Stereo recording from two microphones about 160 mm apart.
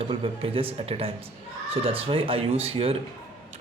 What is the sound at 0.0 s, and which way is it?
Speech, 35° right (ahead or behind).